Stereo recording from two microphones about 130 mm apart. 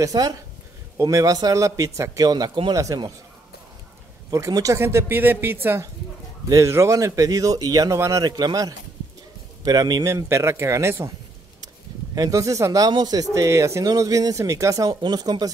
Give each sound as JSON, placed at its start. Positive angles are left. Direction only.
{"t": 0.0, "sound": "speech", "side_deg": -30}
{"t": 4.3, "sound": "speech", "side_deg": -25}
{"t": 12.2, "sound": "speech", "side_deg": -25}